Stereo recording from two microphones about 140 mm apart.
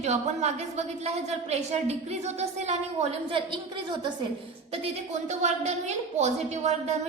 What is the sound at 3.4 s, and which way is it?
Speech, 35° right (ahead or behind).